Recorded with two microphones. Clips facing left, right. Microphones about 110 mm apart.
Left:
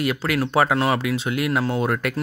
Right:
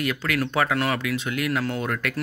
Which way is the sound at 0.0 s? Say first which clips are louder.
Left 3 dB; 30° left (ahead or behind).